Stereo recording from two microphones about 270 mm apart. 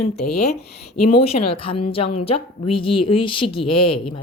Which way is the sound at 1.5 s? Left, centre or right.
Centre.